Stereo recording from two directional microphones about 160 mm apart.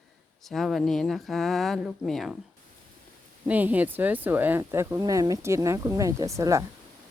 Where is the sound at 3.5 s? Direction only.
10° right (ahead or behind).